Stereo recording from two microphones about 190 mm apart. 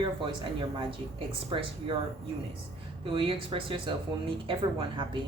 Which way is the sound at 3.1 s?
30° right (ahead or behind).